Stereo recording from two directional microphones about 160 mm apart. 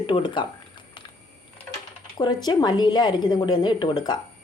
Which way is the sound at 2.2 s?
25° left (ahead or behind).